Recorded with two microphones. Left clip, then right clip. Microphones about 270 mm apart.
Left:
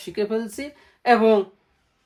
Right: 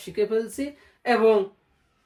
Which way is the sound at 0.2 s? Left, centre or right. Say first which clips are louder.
Right 1 dB; left.